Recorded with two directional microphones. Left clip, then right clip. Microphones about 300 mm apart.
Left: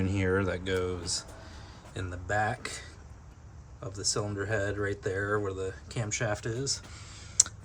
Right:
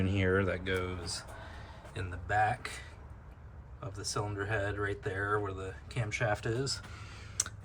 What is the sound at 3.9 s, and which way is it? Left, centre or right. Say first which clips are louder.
Speech: left 5 dB; centre.